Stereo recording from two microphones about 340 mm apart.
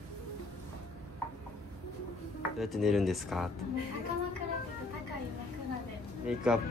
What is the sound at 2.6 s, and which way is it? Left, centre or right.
Speech, centre.